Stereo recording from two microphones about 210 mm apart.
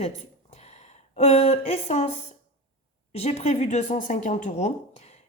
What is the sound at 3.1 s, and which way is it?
A woman's voice, 30° left (ahead or behind).